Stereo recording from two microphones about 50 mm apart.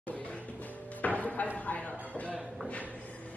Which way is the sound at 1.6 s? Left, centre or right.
Left.